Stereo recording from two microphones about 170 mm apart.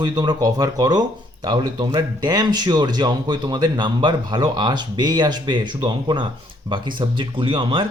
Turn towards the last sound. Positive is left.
turn(degrees=-30)  # may be behind; listen again after turning